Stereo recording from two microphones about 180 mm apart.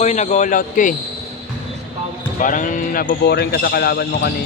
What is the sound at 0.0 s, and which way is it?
Speech, 40° left (ahead or behind).